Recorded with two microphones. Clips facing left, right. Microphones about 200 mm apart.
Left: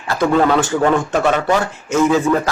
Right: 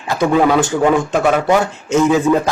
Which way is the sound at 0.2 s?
10° right (ahead or behind).